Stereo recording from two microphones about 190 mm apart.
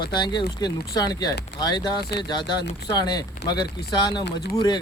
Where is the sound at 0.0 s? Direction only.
25° left (ahead or behind).